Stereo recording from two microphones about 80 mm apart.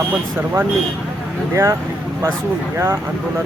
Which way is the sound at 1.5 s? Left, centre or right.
Right.